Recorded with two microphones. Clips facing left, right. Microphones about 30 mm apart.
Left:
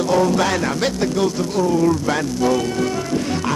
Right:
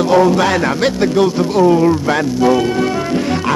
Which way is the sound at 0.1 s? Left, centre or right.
Right.